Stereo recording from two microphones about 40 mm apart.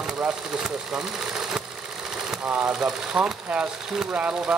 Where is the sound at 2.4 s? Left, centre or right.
Right.